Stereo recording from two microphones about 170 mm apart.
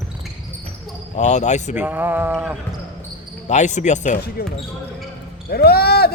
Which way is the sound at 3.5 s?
45° left (ahead or behind).